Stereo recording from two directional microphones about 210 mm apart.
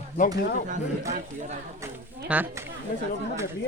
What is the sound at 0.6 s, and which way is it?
Speech, 35° right (ahead or behind).